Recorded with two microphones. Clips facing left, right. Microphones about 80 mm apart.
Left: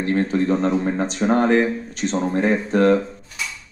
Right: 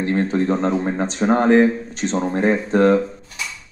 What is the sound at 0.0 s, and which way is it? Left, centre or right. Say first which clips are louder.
Speech: right 1 dB; right.